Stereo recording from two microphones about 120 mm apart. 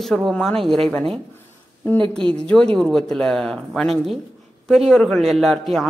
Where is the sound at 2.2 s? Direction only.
45° right (ahead or behind).